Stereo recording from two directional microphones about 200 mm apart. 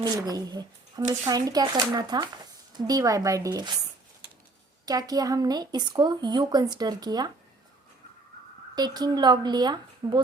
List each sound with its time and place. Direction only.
0.0 s speech: 20° right (ahead or behind)
4.9 s speech: 20° right (ahead or behind)
8.7 s speech: 20° right (ahead or behind)